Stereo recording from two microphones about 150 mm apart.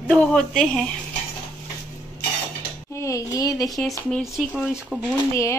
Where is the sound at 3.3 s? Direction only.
25° left (ahead or behind).